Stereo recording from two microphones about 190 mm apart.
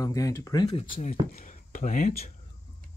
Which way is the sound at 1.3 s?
45° left (ahead or behind).